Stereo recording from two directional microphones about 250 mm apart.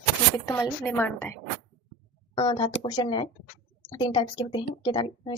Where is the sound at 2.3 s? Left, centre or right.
Centre.